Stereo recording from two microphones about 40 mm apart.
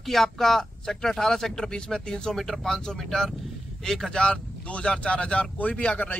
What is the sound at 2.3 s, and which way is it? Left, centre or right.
Speech, centre.